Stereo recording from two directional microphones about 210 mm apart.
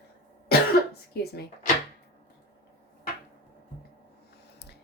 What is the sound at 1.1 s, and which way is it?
Speech, 50° left (ahead or behind).